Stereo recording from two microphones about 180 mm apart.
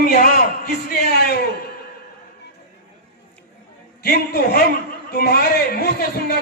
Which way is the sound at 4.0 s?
60° left (ahead or behind).